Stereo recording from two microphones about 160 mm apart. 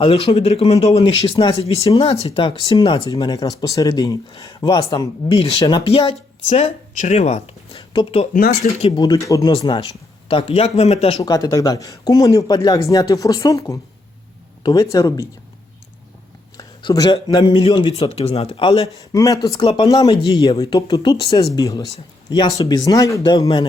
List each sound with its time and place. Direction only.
0.0 s speech: 35° left (ahead or behind)
1.2 s speech: 25° left (ahead or behind)
2.0 s speech: 35° left (ahead or behind)
6.5 s speech: 45° left (ahead or behind)
8.6 s speech: 55° left (ahead or behind)
9.0 s speech: 25° left (ahead or behind); by 11.2 s 40° left (ahead or behind)
11.2 s speech: 20° left (ahead or behind)
16.6 s speech: 25° left (ahead or behind)
19.1 s speech: 20° left (ahead or behind)
20.1 s speech: 35° left (ahead or behind)
20.5 s speech: 25° left (ahead or behind)